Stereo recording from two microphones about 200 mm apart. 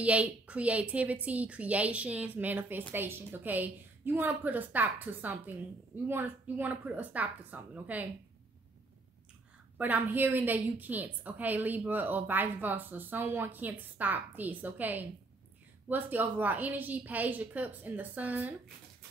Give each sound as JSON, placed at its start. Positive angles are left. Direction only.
{"t": 0.0, "sound": "a woman's voice", "side_deg": -5}
{"t": 9.8, "sound": "a woman's voice", "side_deg": -10}